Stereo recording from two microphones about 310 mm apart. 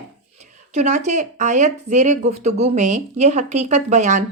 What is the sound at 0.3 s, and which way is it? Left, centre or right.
Speech, right.